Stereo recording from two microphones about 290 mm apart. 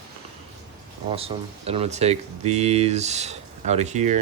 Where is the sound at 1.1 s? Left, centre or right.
Centre.